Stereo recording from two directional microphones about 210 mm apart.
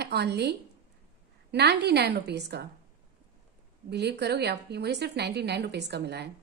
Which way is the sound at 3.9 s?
55° right (ahead or behind).